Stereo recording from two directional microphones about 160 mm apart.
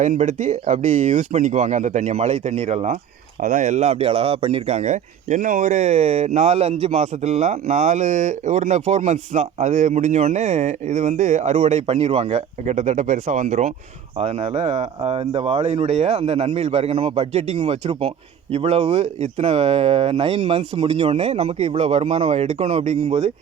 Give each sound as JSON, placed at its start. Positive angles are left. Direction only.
{"t": 0.0, "sound": "speech", "side_deg": -50}
{"t": 14.2, "sound": "speech", "side_deg": -40}